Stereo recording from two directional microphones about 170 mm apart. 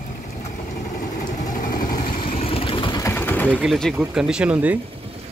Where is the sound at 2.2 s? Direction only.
35° left (ahead or behind).